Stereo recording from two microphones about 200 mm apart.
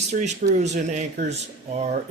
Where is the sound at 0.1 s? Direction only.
35° right (ahead or behind).